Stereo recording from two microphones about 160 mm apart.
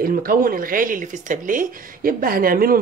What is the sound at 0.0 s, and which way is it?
Speech, 65° right (ahead or behind).